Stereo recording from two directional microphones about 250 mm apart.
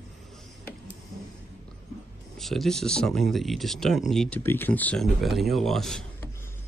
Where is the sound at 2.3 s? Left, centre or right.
Centre.